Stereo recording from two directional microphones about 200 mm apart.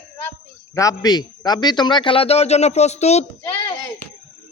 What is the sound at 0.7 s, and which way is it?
A man's voice, 20° left (ahead or behind).